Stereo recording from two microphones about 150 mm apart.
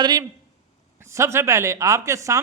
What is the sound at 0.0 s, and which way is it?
A man's voice, 30° right (ahead or behind).